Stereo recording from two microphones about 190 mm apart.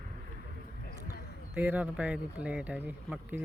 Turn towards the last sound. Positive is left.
turn(degrees=-10)  # may be behind; listen again after turning